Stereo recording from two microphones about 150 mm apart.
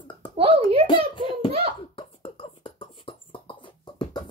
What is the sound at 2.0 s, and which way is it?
Beatboxing, 35° left (ahead or behind).